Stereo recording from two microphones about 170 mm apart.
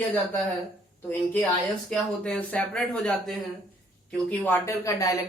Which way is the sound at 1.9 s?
5° left (ahead or behind).